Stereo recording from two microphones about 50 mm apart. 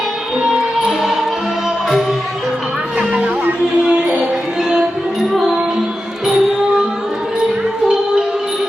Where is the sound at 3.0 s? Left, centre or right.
Right.